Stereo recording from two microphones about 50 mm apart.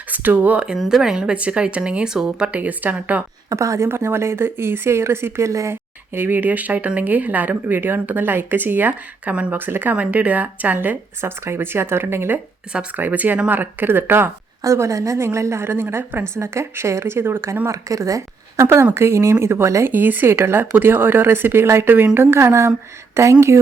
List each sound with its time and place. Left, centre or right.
0.1 s speech: right
0.9 s speech: centre
2.5 s speech: right
3.5 s speech: right
3.8 s a woman's voice: right
5.7 s speech: right
9.9 s speech: right
10.8 s speech: right
13.0 s speech: right
14.6 s a woman's voice: right
17.7 s speech: right
18.5 s a woman's voice: right
19.9 s speech: right
23.1 s speech: right